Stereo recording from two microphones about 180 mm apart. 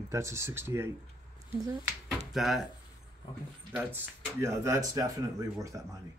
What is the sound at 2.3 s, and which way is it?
Speech, centre (ahead or behind).